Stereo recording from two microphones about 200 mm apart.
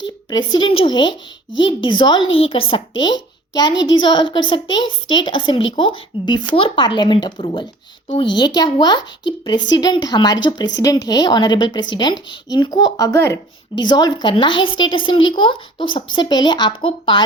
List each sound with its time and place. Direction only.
0.3 s a child's voice: 20° left (ahead or behind)
3.8 s a child's voice: 70° left (ahead or behind)
4.0 s speech: 25° left (ahead or behind)